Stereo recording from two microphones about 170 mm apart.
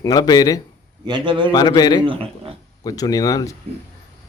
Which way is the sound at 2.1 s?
30° right (ahead or behind).